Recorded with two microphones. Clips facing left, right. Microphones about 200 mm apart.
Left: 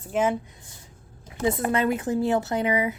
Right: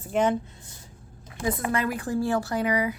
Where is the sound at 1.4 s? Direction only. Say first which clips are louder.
Left 3 dB; 25° left (ahead or behind).